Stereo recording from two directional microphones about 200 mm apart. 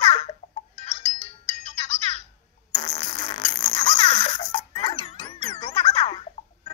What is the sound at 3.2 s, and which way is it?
Music, 30° left (ahead or behind).